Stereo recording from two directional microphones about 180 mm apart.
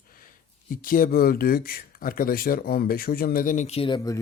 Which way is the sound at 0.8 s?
50° left (ahead or behind).